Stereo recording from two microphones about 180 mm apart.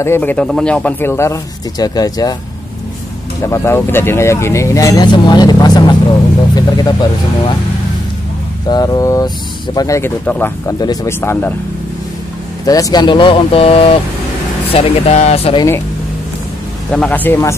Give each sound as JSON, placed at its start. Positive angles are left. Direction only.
{"t": 0.0, "sound": "speech", "side_deg": 10}
{"t": 3.4, "sound": "speech", "side_deg": 15}
{"t": 8.6, "sound": "speech", "side_deg": 20}
{"t": 12.6, "sound": "speech", "side_deg": 20}
{"t": 16.9, "sound": "speech", "side_deg": 10}